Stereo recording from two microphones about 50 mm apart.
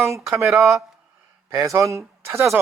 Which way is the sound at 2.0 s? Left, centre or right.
Right.